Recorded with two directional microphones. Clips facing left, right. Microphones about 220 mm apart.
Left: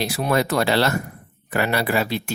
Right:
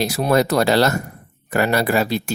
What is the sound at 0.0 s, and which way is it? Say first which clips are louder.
Speech: right 4 dB; 40° right (ahead or behind).